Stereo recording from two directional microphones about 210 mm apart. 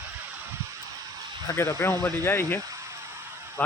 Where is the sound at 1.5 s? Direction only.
15° left (ahead or behind).